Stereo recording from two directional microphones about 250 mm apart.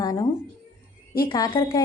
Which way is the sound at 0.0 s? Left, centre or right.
Centre.